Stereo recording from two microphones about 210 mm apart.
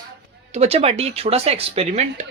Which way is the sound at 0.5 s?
30° right (ahead or behind).